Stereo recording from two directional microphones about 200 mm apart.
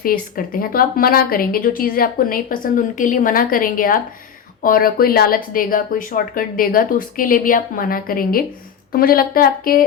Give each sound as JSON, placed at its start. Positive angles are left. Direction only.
{"t": 0.0, "sound": "a woman's voice", "side_deg": 45}